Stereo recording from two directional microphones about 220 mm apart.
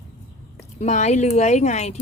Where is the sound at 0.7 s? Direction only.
30° left (ahead or behind).